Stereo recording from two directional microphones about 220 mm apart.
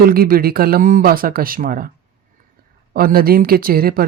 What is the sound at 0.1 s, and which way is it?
Speech, 40° right (ahead or behind).